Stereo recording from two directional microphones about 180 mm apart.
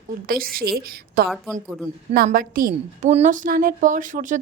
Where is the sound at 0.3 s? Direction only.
55° right (ahead or behind).